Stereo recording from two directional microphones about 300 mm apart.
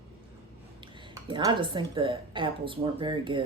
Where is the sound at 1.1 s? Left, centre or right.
Centre.